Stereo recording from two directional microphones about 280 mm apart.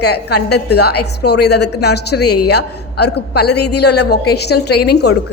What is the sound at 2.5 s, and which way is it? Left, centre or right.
A woman's voice, left.